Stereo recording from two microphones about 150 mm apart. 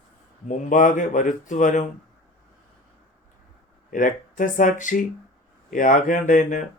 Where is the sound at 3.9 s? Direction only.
60° left (ahead or behind).